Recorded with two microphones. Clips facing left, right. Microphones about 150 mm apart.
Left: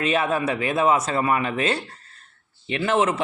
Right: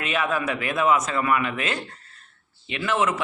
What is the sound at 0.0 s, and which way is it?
A man's voice, 30° left (ahead or behind).